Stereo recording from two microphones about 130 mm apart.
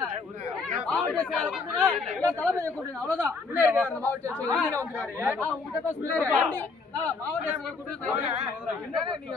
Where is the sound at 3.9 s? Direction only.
15° left (ahead or behind).